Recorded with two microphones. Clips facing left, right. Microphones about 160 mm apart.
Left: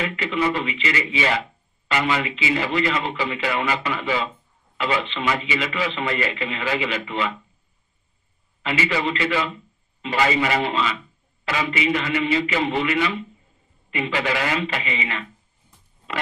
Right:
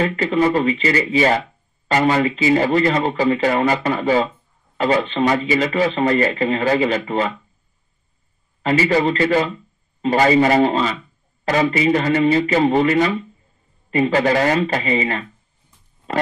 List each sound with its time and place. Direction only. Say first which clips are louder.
0.0 s a man's voice: right 6 dB; 40° right (ahead or behind)
8.6 s a man's voice: right 7 dB; 40° right (ahead or behind)